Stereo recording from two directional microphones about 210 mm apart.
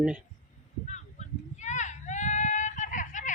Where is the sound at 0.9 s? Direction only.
35° left (ahead or behind).